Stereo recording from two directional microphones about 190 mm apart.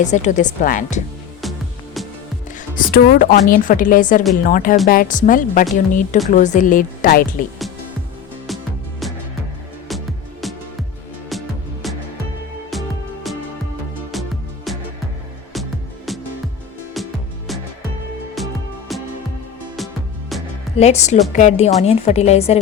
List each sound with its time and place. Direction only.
0.0 s speech: 40° left (ahead or behind)
2.6 s a woman's voice: 50° left (ahead or behind)
8.4 s music: centre (ahead or behind)
14.1 s music: centre (ahead or behind)
16.1 s music: centre (ahead or behind)
18.4 s music: centre (ahead or behind)
20.3 s music: centre (ahead or behind)
20.7 s speech: 35° left (ahead or behind)